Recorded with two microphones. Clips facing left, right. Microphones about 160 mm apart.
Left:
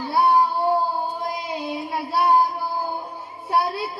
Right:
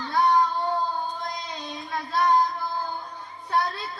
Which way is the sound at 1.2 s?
10° left (ahead or behind).